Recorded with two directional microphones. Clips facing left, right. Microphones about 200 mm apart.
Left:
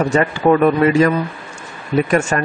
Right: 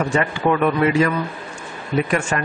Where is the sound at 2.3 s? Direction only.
40° left (ahead or behind).